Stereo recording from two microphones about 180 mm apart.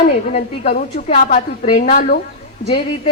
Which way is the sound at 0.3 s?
40° left (ahead or behind).